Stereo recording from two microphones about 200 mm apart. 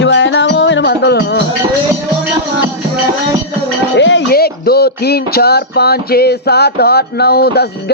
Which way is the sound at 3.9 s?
65° left (ahead or behind).